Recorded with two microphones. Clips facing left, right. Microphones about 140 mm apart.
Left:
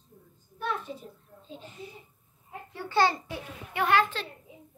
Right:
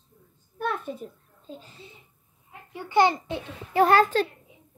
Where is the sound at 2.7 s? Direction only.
15° right (ahead or behind).